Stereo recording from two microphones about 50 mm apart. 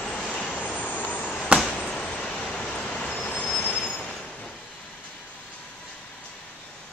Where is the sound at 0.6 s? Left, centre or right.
Left.